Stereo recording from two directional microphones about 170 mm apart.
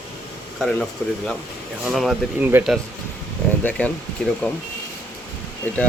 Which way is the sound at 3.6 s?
5° left (ahead or behind).